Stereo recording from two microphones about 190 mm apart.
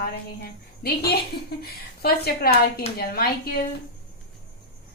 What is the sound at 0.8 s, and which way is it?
A woman's voice, 55° left (ahead or behind).